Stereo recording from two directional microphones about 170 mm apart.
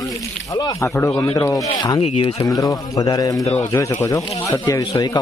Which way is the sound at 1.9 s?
35° left (ahead or behind).